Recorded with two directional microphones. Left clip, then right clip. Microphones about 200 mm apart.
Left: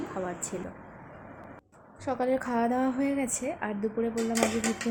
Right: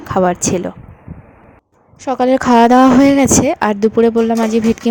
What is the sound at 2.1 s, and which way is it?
A woman's voice, 35° right (ahead or behind).